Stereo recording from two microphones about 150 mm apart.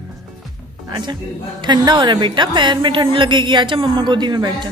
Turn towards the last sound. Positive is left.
turn(degrees=-30)  # may be behind; listen again after turning